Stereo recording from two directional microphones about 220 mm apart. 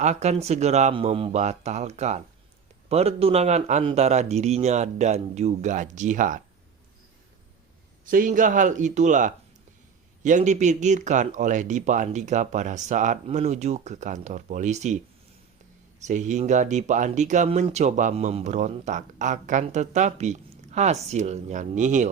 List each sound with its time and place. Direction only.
0.0 s speech: 30° right (ahead or behind)
8.0 s speech: 40° right (ahead or behind)
16.0 s speech: 35° right (ahead or behind)